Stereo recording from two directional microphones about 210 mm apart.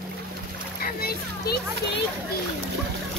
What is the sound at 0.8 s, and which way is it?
Splash, 45° left (ahead or behind).